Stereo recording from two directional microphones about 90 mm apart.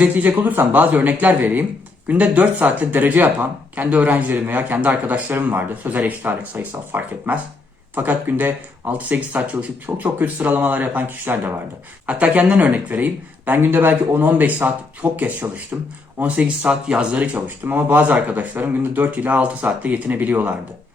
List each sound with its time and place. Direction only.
0.0 s a man's voice: 20° right (ahead or behind)
17.3 s speech: 25° right (ahead or behind)